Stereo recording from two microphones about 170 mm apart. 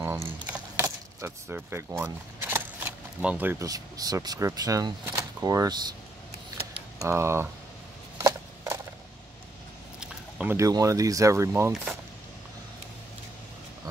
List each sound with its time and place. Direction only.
0.0 s keys jangling: 10° right (ahead or behind)
3.2 s speech: 10° right (ahead or behind)
7.0 s speech: 15° right (ahead or behind)
8.2 s a sound: 20° right (ahead or behind)
9.9 s a sound: 10° right (ahead or behind)
10.7 s speech: 20° right (ahead or behind)